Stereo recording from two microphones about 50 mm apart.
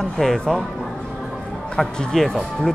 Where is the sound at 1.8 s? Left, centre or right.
Centre.